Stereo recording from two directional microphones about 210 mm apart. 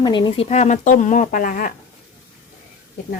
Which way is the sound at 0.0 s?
20° left (ahead or behind).